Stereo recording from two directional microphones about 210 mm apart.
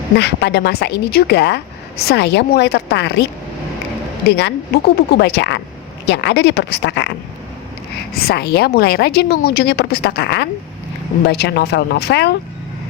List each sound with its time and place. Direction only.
0.2 s a woman's voice: 55° left (ahead or behind)
4.3 s a woman's voice: 50° left (ahead or behind)
8.1 s a woman's voice: 45° left (ahead or behind)